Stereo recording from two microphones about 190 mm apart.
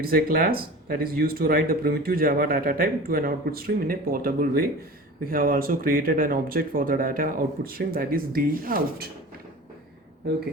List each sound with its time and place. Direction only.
0.0 s speech: 50° right (ahead or behind)